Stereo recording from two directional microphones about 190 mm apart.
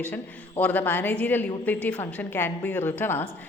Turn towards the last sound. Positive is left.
turn(degrees=10)  # may be behind; listen again after turning